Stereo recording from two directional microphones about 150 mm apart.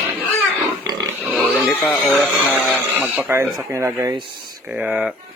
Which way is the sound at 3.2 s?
15° right (ahead or behind).